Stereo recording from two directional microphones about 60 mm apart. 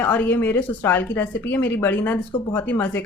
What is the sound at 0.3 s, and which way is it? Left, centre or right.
A woman's voice, left.